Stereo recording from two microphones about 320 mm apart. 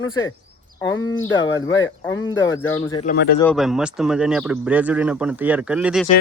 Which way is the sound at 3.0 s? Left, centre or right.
Left.